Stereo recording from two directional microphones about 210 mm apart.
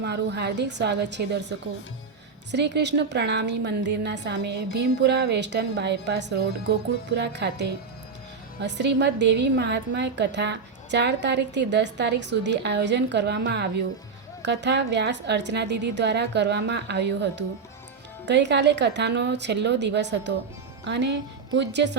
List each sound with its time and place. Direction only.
0.0 s a woman's voice: 55° right (ahead or behind)